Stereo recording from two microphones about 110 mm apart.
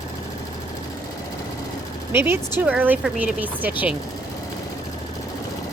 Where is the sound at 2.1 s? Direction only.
20° right (ahead or behind).